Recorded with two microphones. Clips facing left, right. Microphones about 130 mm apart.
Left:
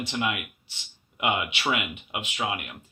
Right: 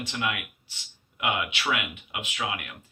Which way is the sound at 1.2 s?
25° left (ahead or behind).